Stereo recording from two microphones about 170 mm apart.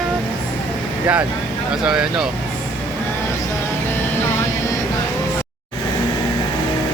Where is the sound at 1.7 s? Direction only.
5° right (ahead or behind).